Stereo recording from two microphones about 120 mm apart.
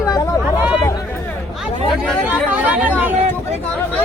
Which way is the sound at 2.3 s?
15° right (ahead or behind).